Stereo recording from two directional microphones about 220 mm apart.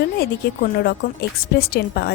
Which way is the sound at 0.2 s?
45° left (ahead or behind).